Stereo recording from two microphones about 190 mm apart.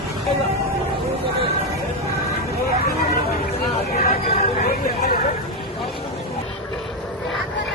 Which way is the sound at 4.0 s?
55° left (ahead or behind).